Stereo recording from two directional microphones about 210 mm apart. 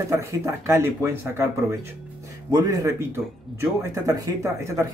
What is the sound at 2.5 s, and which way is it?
Speech, 15° right (ahead or behind).